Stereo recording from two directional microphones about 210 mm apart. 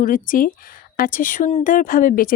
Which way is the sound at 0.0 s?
40° left (ahead or behind).